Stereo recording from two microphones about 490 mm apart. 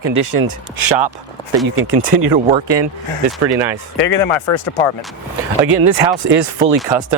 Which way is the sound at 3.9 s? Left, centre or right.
Left.